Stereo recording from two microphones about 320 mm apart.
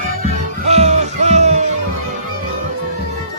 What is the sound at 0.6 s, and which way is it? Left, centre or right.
Music, right.